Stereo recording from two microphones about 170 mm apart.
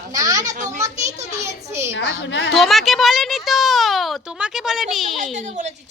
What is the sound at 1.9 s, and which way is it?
Speech, 90° left.